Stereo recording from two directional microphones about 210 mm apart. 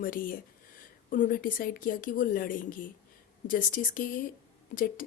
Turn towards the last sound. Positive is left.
turn(degrees=40)  # may be behind; listen again after turning